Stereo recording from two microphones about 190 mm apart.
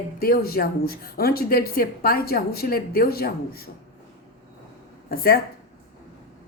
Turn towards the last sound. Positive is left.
turn(degrees=55)  # may be behind; listen again after turning